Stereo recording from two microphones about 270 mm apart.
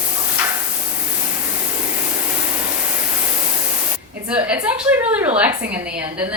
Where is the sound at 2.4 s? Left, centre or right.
Centre.